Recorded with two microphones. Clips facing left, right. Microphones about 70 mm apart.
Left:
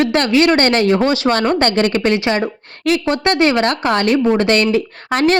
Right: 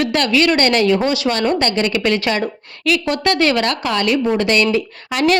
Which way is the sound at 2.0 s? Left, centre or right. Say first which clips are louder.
Left 2 dB; left.